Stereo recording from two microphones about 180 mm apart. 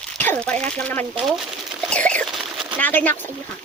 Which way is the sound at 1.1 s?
Centre (ahead or behind).